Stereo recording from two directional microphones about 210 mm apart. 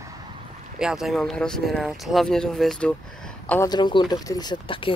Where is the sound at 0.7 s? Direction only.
5° right (ahead or behind).